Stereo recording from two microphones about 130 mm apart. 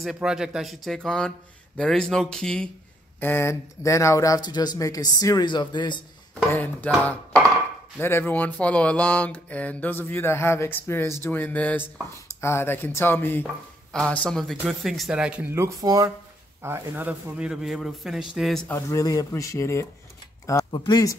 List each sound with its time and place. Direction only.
0.0 s speech: 5° right (ahead or behind)
3.2 s speech: 15° left (ahead or behind); by 5.9 s 35° left (ahead or behind)
6.5 s speech: 15° left (ahead or behind)
8.0 s speech: 15° left (ahead or behind); by 15.4 s 5° right (ahead or behind)
15.5 s speech: 25° right (ahead or behind)
16.6 s speech: 15° right (ahead or behind); by 18.6 s centre (ahead or behind)
18.7 s speech: 20° left (ahead or behind)
20.7 s speech: 35° left (ahead or behind)